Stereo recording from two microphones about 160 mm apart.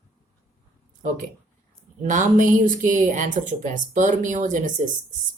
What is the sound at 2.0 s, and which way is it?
Speech, 55° right (ahead or behind).